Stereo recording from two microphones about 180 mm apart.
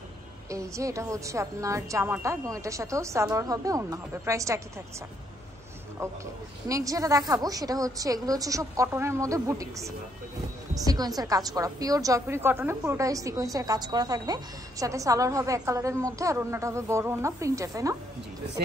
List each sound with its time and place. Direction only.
0.5 s a woman's voice: 15° right (ahead or behind)
6.7 s a woman's voice: 20° right (ahead or behind)
10.9 s a woman's voice: 20° right (ahead or behind)